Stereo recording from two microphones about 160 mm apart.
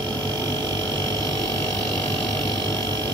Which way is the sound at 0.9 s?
25° right (ahead or behind).